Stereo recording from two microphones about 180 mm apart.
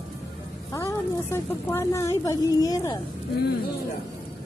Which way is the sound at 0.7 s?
15° left (ahead or behind).